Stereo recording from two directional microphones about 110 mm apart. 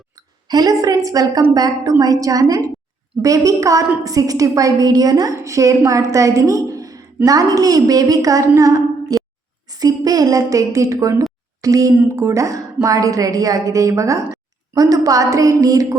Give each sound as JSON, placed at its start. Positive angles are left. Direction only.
{"t": 0.2, "sound": "a woman's voice", "side_deg": -35}